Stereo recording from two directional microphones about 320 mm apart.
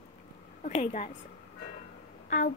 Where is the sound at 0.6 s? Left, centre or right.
Left.